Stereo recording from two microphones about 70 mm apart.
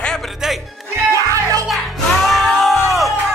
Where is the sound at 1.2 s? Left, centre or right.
Right.